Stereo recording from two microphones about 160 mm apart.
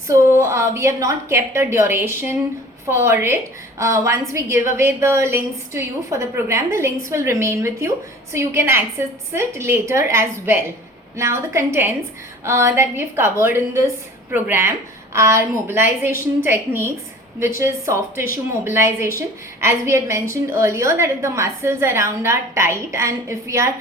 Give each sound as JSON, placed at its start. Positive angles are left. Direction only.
{"t": 0.1, "sound": "a woman's voice", "side_deg": -15}